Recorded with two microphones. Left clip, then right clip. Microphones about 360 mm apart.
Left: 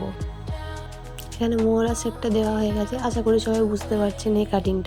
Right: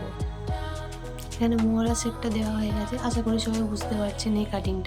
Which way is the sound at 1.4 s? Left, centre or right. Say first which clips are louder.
Left 5 dB; centre.